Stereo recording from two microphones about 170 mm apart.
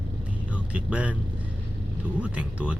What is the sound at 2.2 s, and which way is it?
Speech, 5° right (ahead or behind).